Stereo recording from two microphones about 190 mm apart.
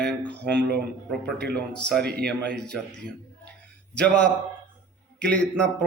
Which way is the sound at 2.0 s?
55° right (ahead or behind).